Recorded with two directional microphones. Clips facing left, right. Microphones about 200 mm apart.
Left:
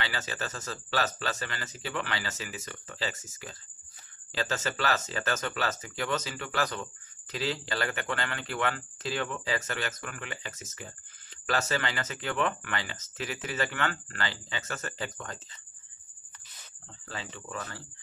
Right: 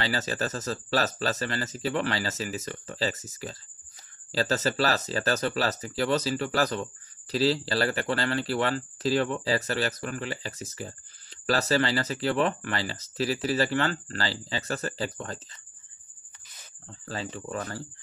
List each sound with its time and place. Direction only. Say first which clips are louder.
0.0 s speech: right 6 dB; 40° right (ahead or behind)
17.1 s speech: right 6 dB; 40° right (ahead or behind)